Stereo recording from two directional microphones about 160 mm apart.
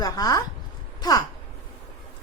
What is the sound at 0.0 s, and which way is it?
Speech, 25° left (ahead or behind).